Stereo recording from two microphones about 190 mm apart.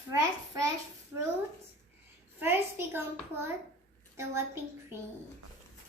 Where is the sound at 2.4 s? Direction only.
10° right (ahead or behind).